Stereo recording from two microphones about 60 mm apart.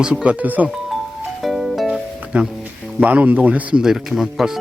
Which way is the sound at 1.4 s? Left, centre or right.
Centre.